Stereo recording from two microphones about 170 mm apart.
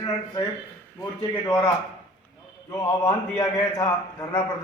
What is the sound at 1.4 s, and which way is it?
Speech, 15° left (ahead or behind).